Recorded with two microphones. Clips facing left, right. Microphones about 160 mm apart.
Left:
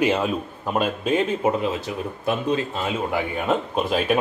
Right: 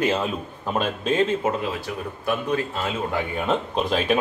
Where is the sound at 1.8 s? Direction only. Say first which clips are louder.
Left 3 dB; 20° left (ahead or behind).